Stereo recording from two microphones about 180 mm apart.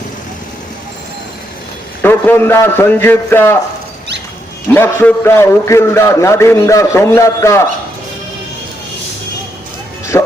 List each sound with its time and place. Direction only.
2.0 s a man's voice: 10° left (ahead or behind)
4.7 s a man's voice: 10° left (ahead or behind)
10.1 s music: 15° left (ahead or behind)